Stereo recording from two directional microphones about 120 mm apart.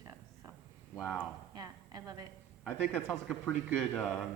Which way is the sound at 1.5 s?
30° right (ahead or behind).